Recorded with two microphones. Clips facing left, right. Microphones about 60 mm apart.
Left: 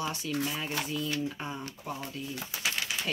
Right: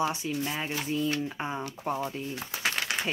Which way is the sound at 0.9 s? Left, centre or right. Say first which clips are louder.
Right 3 dB; right.